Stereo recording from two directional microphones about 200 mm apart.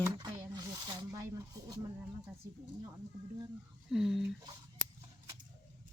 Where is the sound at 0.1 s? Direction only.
20° right (ahead or behind).